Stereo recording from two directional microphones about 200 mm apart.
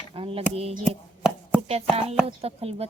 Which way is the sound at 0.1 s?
25° right (ahead or behind).